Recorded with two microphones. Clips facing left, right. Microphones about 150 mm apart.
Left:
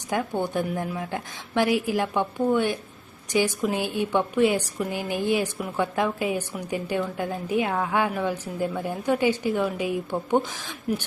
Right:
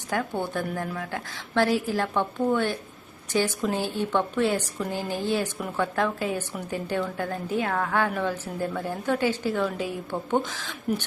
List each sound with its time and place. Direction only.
0.1 s a woman's voice: 20° left (ahead or behind)